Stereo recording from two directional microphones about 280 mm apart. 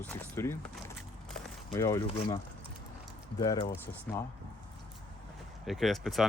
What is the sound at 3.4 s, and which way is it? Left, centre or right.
Speech, centre.